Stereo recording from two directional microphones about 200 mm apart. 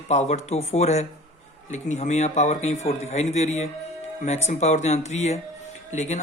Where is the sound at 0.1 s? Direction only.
35° left (ahead or behind).